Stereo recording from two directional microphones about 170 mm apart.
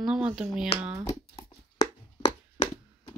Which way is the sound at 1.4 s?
25° left (ahead or behind).